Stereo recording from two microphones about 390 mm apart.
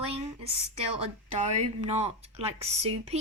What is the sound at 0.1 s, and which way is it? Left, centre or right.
Speech, centre.